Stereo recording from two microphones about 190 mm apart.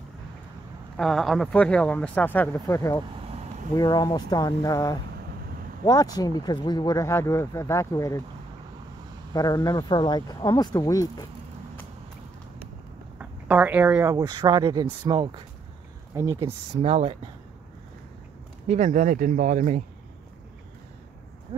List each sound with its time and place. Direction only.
0.9 s speech: centre (ahead or behind)
9.3 s speech: 20° left (ahead or behind)
13.2 s speech: 10° right (ahead or behind); by 17.2 s 30° right (ahead or behind)
18.7 s speech: 40° right (ahead or behind)
21.5 s a sound: 35° right (ahead or behind)